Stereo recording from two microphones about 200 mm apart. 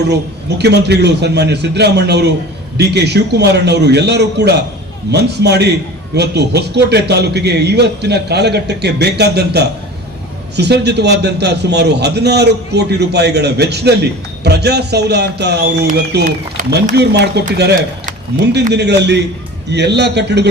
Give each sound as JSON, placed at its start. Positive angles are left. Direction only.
{"t": 0.6, "sound": "a man's voice", "side_deg": -55}